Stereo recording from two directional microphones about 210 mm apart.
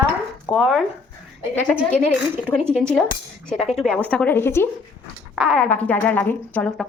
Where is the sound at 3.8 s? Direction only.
5° left (ahead or behind).